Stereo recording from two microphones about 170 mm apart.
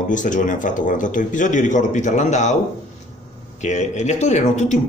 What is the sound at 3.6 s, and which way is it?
A man's voice, 45° left (ahead or behind).